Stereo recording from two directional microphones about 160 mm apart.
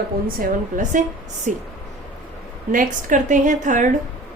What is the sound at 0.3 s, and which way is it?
A woman's voice, 50° right (ahead or behind).